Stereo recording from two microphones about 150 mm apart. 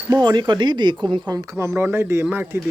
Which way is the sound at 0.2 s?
30° right (ahead or behind).